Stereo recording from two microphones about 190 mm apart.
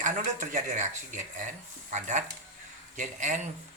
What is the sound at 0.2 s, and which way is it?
Speech, 40° right (ahead or behind).